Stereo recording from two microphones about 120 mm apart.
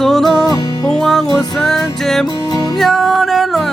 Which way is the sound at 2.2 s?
30° left (ahead or behind).